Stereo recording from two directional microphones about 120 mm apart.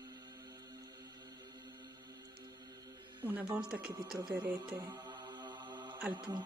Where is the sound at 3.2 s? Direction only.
10° right (ahead or behind).